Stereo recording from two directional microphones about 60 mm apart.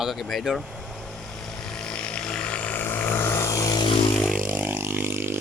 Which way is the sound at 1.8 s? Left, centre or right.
Centre.